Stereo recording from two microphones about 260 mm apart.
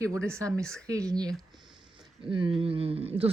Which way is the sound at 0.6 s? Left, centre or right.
Centre.